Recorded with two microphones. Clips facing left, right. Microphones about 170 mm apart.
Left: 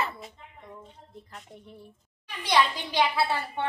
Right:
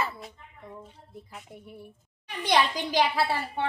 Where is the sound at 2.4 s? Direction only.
45° right (ahead or behind).